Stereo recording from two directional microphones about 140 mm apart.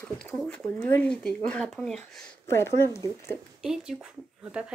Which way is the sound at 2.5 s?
20° left (ahead or behind).